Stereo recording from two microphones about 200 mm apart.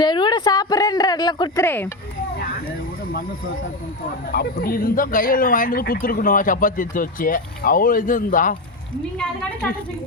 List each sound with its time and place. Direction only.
0.0 s a sound: 20° left (ahead or behind)
1.6 s speech: 10° left (ahead or behind)
4.3 s speech: 45° left (ahead or behind)